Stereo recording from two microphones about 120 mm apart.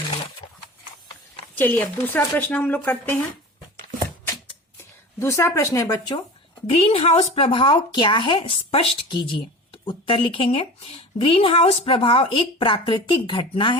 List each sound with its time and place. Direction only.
1.5 s speech: 15° left (ahead or behind)
4.8 s speech: 25° left (ahead or behind)
6.7 s speech: 50° left (ahead or behind)